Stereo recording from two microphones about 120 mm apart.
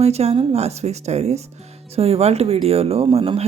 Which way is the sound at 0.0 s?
60° right (ahead or behind).